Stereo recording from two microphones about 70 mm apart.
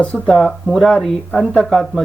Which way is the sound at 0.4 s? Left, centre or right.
Centre.